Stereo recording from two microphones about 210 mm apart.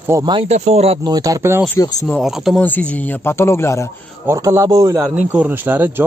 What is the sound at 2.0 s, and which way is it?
Speech, centre (ahead or behind).